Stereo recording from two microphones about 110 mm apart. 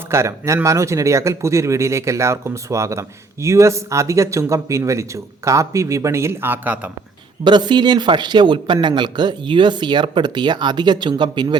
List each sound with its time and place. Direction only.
0.1 s speech: 25° right (ahead or behind)
7.4 s speech: 45° right (ahead or behind)